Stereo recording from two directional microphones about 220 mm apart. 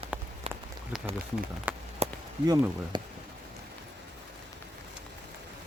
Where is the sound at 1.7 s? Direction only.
10° right (ahead or behind).